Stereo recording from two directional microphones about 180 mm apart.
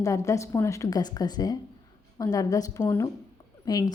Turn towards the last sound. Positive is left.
turn(degrees=20)  # may be behind; listen again after turning